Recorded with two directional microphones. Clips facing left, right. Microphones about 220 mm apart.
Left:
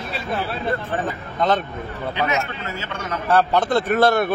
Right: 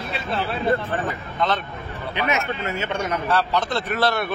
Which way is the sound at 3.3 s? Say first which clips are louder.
Left 7 dB; 50° left (ahead or behind).